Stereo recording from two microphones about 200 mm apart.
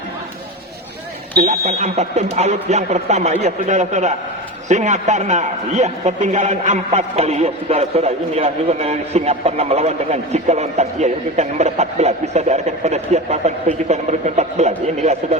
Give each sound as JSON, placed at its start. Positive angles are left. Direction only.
{"t": 1.5, "sound": "a man's voice", "side_deg": -35}